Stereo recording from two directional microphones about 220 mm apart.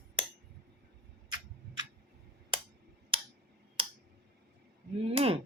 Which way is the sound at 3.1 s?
25° right (ahead or behind).